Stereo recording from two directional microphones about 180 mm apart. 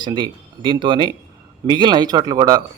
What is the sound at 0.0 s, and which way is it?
Speech, 25° right (ahead or behind).